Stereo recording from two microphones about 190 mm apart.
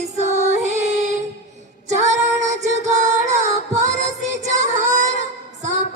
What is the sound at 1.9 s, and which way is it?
Music, 40° right (ahead or behind).